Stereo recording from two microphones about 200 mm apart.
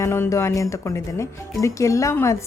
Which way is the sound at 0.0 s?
15° left (ahead or behind).